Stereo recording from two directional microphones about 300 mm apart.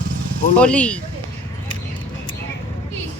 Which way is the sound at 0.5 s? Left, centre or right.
Centre.